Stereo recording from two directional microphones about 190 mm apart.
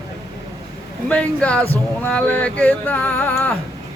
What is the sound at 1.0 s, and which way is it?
Speech, 5° left (ahead or behind).